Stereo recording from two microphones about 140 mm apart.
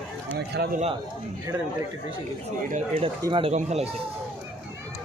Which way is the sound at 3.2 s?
35° right (ahead or behind).